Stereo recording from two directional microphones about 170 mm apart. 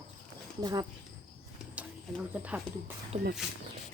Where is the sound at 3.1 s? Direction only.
40° right (ahead or behind).